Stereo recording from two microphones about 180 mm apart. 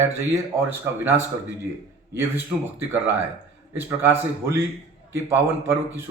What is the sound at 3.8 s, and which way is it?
Speech, 10° right (ahead or behind).